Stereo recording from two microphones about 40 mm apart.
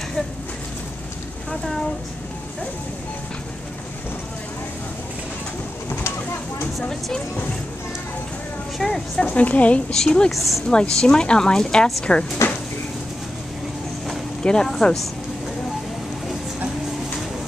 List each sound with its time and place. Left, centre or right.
1.5 s speech: centre
8.8 s speech: centre
9.2 s a woman's voice: left
10.0 s a woman's voice: left
10.3 s speech: centre
10.7 s a woman's voice: centre
12.4 s a sound: left
14.4 s speech: centre